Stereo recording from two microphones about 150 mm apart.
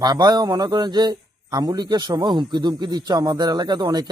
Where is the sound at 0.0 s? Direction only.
25° right (ahead or behind).